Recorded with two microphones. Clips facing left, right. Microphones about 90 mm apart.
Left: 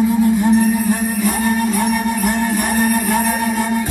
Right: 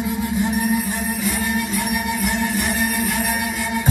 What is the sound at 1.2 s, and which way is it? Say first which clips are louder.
Music: left 6 dB; 50° left (ahead or behind).